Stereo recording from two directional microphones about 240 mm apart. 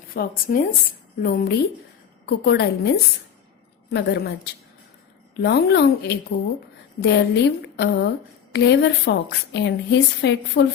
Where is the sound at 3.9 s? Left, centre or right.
Left.